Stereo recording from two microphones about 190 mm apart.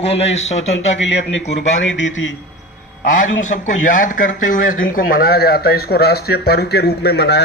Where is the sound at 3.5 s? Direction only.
45° left (ahead or behind); by 7.4 s 60° left (ahead or behind).